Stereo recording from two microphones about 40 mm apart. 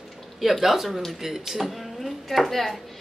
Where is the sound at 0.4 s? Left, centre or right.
Centre.